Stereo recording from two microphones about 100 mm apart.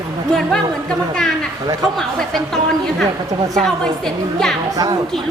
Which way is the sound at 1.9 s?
5° left (ahead or behind).